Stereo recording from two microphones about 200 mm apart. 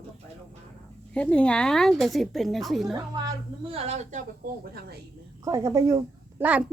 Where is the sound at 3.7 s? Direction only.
30° right (ahead or behind).